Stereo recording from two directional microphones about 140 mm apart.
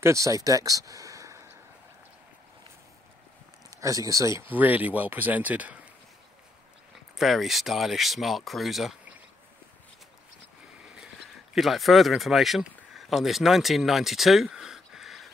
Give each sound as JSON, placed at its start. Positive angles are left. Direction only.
{"t": 0.0, "sound": "speech", "side_deg": -20}
{"t": 3.7, "sound": "speech", "side_deg": -25}
{"t": 7.2, "sound": "speech", "side_deg": 0}
{"t": 11.5, "sound": "speech", "side_deg": 0}